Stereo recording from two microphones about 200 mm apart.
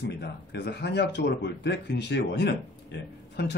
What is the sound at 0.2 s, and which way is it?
Speech, 55° left (ahead or behind).